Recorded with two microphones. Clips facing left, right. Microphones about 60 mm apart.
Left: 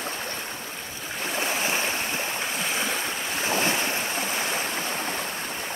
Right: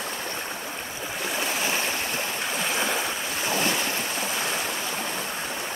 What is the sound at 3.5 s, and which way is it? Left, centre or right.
Waves, left.